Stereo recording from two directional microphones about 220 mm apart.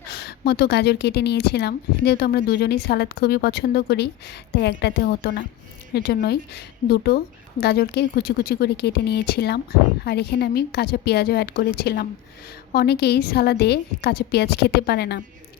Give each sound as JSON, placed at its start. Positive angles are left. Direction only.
{"t": 0.1, "sound": "a woman's voice", "side_deg": 45}